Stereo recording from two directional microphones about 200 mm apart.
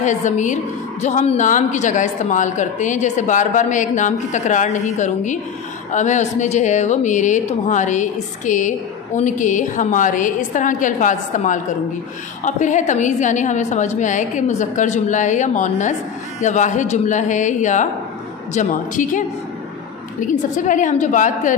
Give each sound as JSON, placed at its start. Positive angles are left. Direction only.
{"t": 0.0, "sound": "a woman's voice", "side_deg": 35}